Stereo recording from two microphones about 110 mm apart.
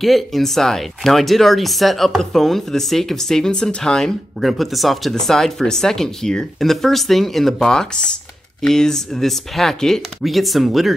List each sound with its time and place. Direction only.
0.0 s speech: centre (ahead or behind)